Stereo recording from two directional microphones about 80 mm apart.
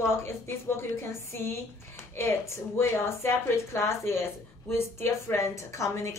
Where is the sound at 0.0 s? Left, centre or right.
Left.